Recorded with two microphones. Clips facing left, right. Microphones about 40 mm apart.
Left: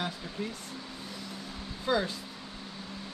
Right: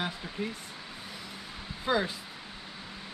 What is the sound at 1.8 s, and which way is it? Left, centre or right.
Speech, centre.